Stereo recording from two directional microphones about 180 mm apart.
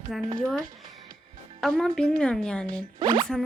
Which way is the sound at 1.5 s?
Centre (ahead or behind).